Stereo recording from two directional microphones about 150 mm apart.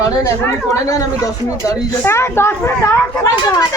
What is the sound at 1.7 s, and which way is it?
Speech, 15° left (ahead or behind).